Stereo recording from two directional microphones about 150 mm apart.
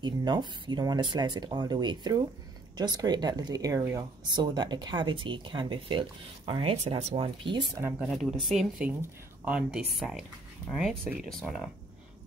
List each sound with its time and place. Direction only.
0.0 s speech: 30° right (ahead or behind)
6.9 s speech: 45° right (ahead or behind)
7.2 s speech: 35° right (ahead or behind)
8.0 s speech: centre (ahead or behind)